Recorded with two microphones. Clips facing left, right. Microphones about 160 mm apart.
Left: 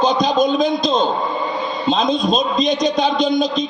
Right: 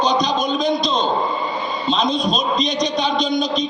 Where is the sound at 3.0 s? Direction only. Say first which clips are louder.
Left 3 dB; 50° left (ahead or behind).